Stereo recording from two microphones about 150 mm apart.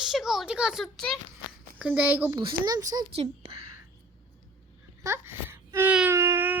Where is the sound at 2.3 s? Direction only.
30° right (ahead or behind).